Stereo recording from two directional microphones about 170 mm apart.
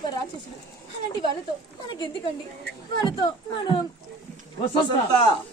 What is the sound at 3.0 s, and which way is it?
Speech, 25° left (ahead or behind).